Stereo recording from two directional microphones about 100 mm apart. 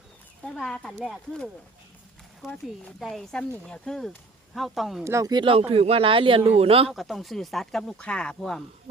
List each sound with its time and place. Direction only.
0.4 s speech: 10° left (ahead or behind)
3.0 s speech: 5° left (ahead or behind)
5.0 s speech: 30° right (ahead or behind)
5.3 s speech: 50° right (ahead or behind)
5.5 s a man's voice: 80° right
6.9 s speech: centre (ahead or behind)